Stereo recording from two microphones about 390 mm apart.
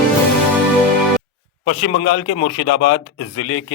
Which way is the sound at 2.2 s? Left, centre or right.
Left.